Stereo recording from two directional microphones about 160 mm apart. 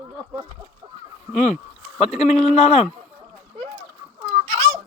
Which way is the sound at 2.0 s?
40° left (ahead or behind).